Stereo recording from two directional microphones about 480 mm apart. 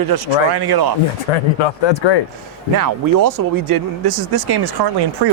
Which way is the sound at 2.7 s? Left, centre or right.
Right.